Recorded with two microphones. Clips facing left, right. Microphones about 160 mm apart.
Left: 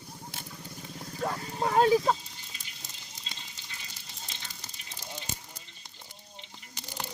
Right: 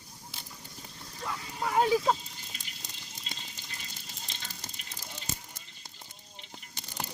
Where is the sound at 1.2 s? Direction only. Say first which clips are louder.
Left 4 dB; 40° left (ahead or behind).